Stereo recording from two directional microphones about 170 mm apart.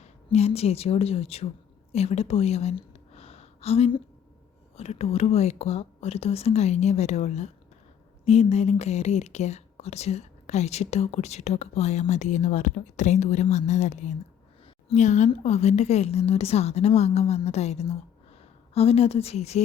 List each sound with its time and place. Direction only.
0.0 s a woman's voice: 40° left (ahead or behind)
1.9 s a sound: 40° left (ahead or behind)
4.8 s speech: 40° left (ahead or behind)